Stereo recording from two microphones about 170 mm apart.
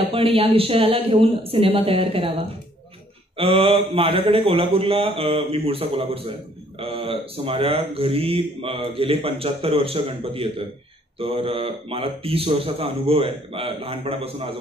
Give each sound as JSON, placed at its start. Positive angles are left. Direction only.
{"t": 0.0, "sound": "a man's voice", "side_deg": -35}